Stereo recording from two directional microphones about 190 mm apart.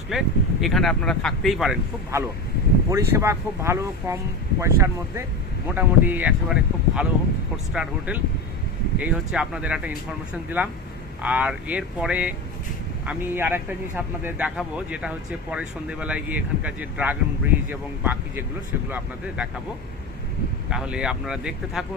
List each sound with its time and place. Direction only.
0.1 s speech: centre (ahead or behind)
2.9 s speech: 15° right (ahead or behind)
20.7 s speech: 5° right (ahead or behind)